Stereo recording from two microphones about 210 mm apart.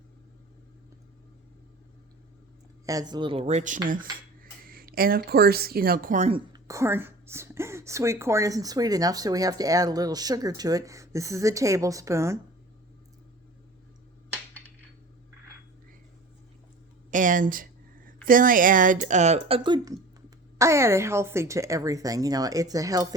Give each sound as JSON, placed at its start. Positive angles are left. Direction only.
{"t": 2.8, "sound": "speech", "side_deg": -15}
{"t": 6.5, "sound": "speech", "side_deg": -15}
{"t": 17.1, "sound": "speech", "side_deg": -40}